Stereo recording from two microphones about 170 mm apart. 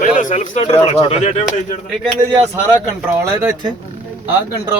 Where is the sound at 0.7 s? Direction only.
35° left (ahead or behind).